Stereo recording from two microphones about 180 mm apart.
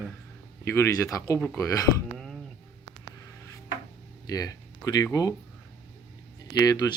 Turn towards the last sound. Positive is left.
turn(degrees=20)  # may be behind; listen again after turning